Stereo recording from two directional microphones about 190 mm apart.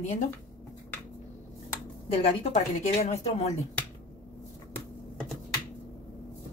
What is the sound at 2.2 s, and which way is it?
Speech, 35° left (ahead or behind).